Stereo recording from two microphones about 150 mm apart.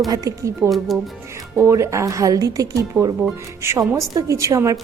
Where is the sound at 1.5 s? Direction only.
20° right (ahead or behind).